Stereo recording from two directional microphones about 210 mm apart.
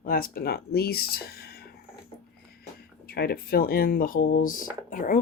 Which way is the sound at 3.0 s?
45° left (ahead or behind).